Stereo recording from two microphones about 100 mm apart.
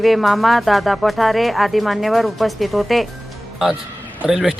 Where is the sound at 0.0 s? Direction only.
Centre (ahead or behind).